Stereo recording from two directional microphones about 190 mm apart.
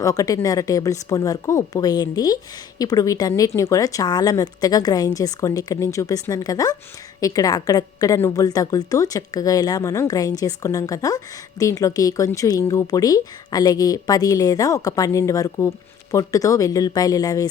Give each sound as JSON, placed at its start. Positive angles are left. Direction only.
{"t": 0.0, "sound": "a woman's voice", "side_deg": 20}